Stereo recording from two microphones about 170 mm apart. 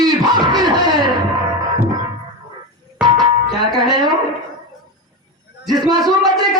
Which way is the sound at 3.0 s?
25° right (ahead or behind).